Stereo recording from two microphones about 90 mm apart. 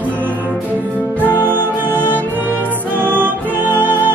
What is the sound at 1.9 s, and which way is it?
Music, 20° left (ahead or behind).